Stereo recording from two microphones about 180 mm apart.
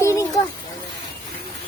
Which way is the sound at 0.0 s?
15° left (ahead or behind).